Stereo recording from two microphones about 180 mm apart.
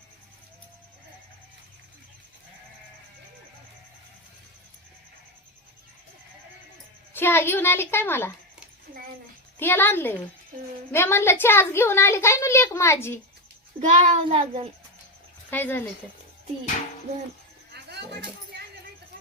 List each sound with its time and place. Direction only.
7.1 s a woman's voice: 10° left (ahead or behind)
9.6 s a woman's voice: 10° left (ahead or behind)
13.7 s a child's voice: 40° right (ahead or behind)
15.4 s a woman's voice: 10° left (ahead or behind)